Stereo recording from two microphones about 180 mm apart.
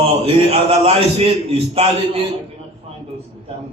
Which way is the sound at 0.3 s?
35° right (ahead or behind).